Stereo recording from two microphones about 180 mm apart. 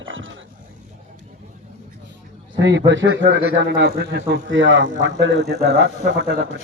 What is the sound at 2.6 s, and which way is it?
A man's voice, 80° right.